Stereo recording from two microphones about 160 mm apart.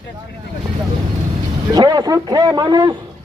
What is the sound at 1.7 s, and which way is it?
A man's voice, 25° right (ahead or behind).